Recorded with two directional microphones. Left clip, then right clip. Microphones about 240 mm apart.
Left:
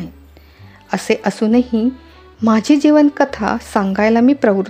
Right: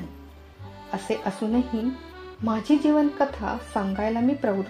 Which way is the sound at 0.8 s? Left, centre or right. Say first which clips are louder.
Left 11 dB; left.